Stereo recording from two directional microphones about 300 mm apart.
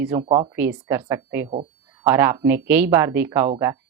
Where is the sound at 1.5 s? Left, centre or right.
Centre.